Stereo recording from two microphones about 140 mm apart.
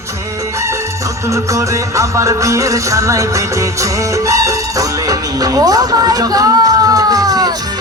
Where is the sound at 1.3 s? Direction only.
20° right (ahead or behind).